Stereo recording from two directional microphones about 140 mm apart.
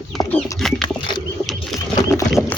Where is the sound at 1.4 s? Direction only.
Centre (ahead or behind).